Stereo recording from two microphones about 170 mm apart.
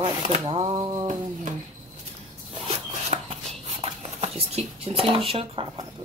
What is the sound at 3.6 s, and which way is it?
Dishes, 40° right (ahead or behind).